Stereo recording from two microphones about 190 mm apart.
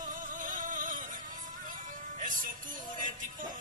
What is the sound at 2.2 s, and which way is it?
Music, 45° right (ahead or behind).